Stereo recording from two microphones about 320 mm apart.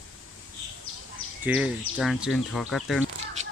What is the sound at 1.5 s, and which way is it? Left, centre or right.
Speech, centre.